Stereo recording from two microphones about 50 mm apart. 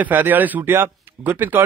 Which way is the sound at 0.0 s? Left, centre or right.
Right.